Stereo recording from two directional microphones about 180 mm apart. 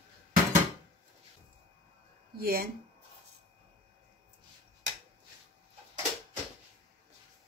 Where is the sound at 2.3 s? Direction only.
55° right (ahead or behind).